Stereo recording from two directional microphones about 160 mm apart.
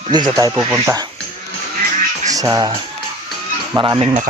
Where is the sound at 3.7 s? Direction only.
30° right (ahead or behind).